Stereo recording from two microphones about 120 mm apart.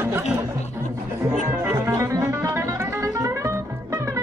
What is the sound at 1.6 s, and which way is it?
Music, 25° right (ahead or behind).